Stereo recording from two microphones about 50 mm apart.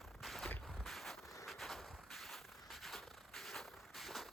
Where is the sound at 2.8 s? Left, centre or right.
Centre.